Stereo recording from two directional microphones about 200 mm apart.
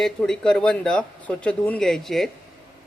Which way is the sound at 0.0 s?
5° left (ahead or behind).